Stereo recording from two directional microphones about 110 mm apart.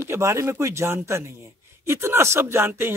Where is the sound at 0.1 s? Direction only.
25° right (ahead or behind).